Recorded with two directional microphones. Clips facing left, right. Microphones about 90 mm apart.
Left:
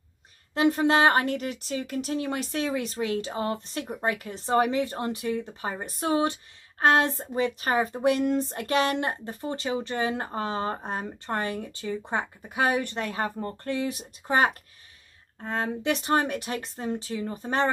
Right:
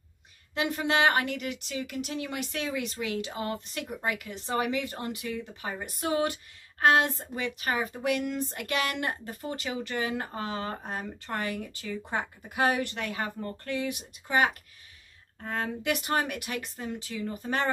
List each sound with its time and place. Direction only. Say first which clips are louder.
0.6 s speech: left 5 dB; 35° left (ahead or behind)
15.4 s speech: left 3 dB; 25° left (ahead or behind)